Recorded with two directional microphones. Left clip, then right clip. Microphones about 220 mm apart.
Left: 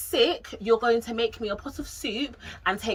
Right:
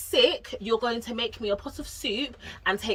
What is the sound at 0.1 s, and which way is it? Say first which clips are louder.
Speech: right 1 dB; centre (ahead or behind).